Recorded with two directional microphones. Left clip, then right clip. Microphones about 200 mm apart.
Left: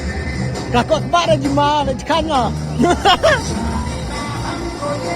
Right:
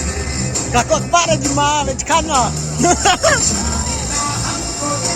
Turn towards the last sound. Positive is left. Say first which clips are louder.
# left 1 dB
turn(degrees=35)  # may be behind; listen again after turning